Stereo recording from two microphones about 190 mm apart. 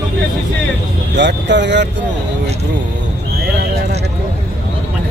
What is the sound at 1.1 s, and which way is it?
Speech, 65° right (ahead or behind).